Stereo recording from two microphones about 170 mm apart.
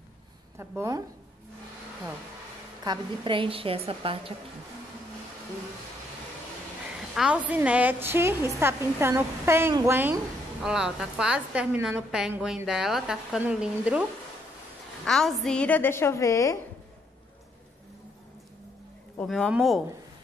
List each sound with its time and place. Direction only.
0.6 s a woman's voice: 15° right (ahead or behind)
2.8 s a woman's voice: 25° right (ahead or behind)
7.2 s a woman's voice: 5° right (ahead or behind)
15.0 s a woman's voice: centre (ahead or behind); by 16.5 s 20° left (ahead or behind)
19.1 s a woman's voice: 5° left (ahead or behind)